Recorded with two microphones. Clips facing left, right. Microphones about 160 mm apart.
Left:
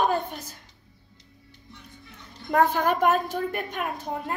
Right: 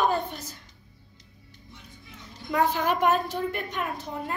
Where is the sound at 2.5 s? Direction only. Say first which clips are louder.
Left 3 dB; 50° left (ahead or behind).